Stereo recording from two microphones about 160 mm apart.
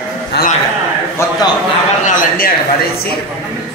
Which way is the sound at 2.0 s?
60° left (ahead or behind).